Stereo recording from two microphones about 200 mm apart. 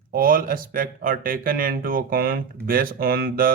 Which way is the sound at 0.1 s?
45° right (ahead or behind).